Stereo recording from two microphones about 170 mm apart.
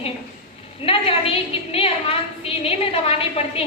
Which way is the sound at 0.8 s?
35° left (ahead or behind).